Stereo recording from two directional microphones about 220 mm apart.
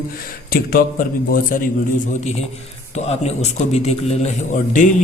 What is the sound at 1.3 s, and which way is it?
Speech, 40° left (ahead or behind).